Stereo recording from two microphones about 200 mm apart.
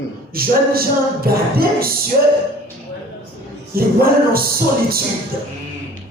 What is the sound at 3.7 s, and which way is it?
Speech, 50° right (ahead or behind).